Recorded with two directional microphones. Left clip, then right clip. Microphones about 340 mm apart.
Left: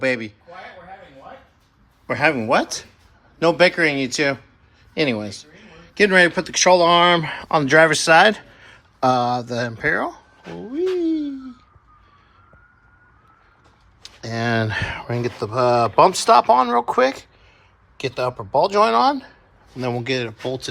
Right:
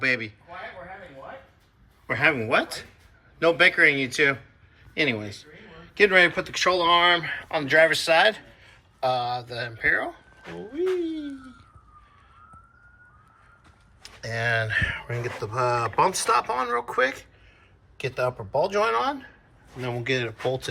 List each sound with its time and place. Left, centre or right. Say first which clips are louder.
0.0 s a man's voice: left 3 dB; centre
2.0 s a man's voice: left 4 dB; centre
10.8 s a sound: left 6 dB; centre
14.0 s a man's voice: left 3 dB; centre